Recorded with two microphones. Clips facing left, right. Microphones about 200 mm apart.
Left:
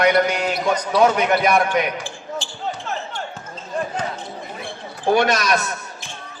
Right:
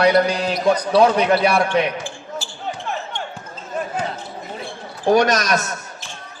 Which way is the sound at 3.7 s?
5° right (ahead or behind).